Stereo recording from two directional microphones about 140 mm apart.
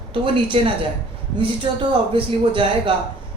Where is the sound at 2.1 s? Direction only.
40° right (ahead or behind).